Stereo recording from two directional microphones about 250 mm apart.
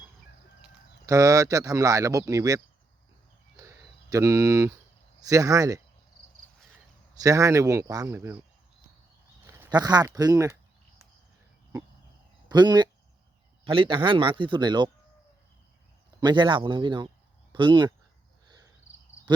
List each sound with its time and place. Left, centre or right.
1.0 s speech: centre
3.6 s a sound: centre
5.2 s speech: centre
7.2 s speech: centre
9.5 s speech: centre
12.5 s speech: centre
16.2 s speech: centre